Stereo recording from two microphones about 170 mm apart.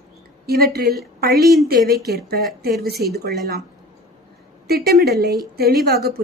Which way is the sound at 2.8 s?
65° right (ahead or behind).